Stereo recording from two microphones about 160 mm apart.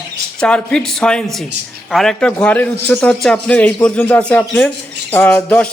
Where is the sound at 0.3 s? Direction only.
5° left (ahead or behind).